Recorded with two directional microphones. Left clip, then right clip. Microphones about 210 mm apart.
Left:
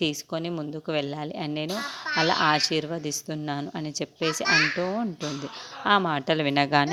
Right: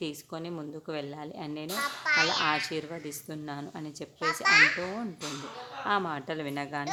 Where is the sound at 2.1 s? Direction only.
35° right (ahead or behind).